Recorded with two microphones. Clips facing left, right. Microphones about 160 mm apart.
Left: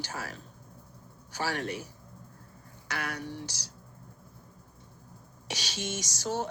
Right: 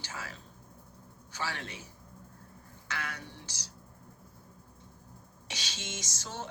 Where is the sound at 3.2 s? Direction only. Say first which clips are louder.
Left 9 dB; 10° left (ahead or behind).